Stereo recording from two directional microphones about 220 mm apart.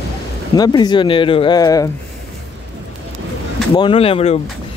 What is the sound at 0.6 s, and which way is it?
Speech, 20° left (ahead or behind).